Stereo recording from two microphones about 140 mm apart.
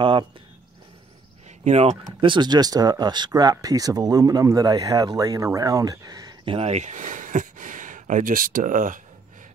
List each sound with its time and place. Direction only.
0.0 s speech: 35° right (ahead or behind)
1.6 s speech: 50° right (ahead or behind); by 9.0 s 70° right (ahead or behind)